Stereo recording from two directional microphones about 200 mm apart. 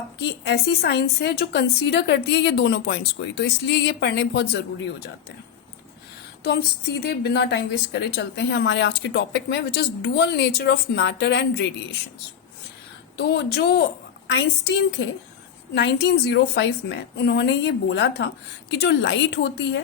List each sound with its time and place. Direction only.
0.2 s a woman's voice: 55° left (ahead or behind)
6.4 s a woman's voice: 55° left (ahead or behind)
13.1 s a woman's voice: 55° left (ahead or behind)